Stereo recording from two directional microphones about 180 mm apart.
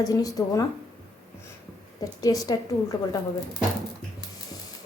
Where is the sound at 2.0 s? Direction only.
20° left (ahead or behind).